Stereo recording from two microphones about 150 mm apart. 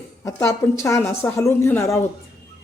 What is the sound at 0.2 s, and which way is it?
A woman's voice, 20° left (ahead or behind).